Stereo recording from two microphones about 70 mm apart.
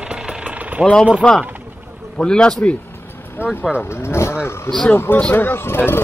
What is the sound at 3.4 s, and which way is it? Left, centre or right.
Speech, left.